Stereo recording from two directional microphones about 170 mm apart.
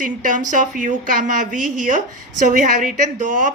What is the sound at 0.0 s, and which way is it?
A woman's voice, 50° right (ahead or behind).